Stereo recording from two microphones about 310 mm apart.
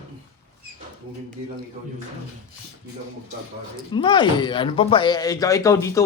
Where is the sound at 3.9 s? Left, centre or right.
Centre.